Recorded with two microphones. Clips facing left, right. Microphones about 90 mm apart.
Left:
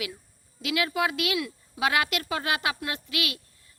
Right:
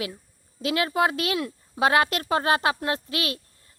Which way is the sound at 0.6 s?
35° right (ahead or behind).